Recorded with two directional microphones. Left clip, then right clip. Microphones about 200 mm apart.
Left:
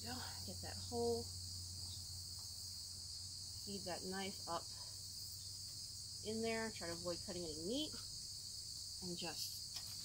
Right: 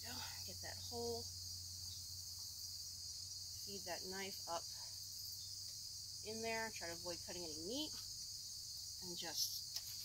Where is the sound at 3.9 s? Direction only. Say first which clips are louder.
Left 1 dB; 20° left (ahead or behind).